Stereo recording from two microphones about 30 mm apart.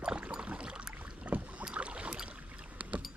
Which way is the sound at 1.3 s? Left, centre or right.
Right.